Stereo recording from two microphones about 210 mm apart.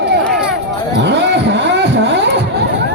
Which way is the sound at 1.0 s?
55° right (ahead or behind).